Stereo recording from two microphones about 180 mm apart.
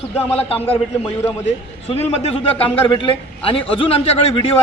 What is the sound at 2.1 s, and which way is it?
A man's voice, 35° left (ahead or behind).